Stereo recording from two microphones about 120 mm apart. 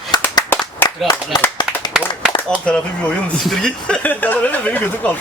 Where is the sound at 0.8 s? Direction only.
15° left (ahead or behind).